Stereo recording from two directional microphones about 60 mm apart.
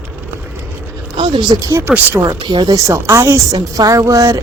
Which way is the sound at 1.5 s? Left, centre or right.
Right.